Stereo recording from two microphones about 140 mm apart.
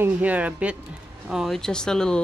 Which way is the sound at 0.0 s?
10° right (ahead or behind).